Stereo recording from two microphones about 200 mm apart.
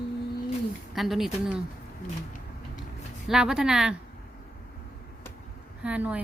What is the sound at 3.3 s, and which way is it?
Speech, 5° right (ahead or behind).